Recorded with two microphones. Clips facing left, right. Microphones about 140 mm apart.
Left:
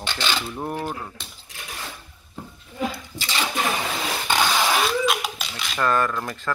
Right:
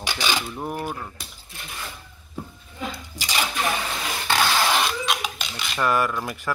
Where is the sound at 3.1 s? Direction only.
15° right (ahead or behind).